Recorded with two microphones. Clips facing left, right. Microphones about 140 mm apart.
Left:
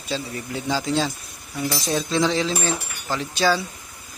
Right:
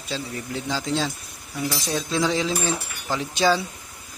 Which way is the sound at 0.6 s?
5° left (ahead or behind).